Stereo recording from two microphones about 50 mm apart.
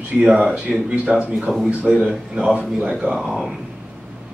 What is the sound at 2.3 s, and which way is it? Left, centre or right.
Speech, centre.